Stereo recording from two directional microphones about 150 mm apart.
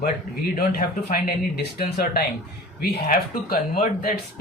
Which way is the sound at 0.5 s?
80° left.